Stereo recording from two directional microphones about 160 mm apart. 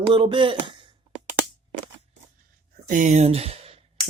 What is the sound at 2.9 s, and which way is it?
Speech, 50° right (ahead or behind).